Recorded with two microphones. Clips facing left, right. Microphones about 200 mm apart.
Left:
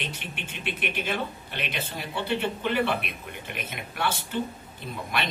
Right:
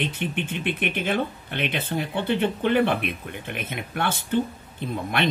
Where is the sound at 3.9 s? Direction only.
55° right (ahead or behind).